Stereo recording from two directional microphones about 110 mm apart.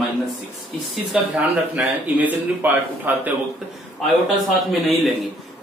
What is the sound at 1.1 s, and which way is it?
Speech, 5° right (ahead or behind).